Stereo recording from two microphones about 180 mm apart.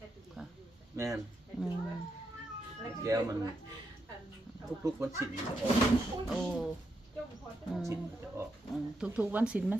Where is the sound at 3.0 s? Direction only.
20° right (ahead or behind).